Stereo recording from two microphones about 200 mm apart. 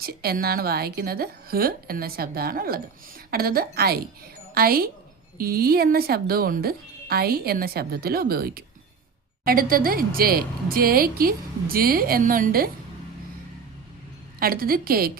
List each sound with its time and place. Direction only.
0.0 s a woman's voice: 50° right (ahead or behind)
14.3 s a woman's voice: 50° right (ahead or behind)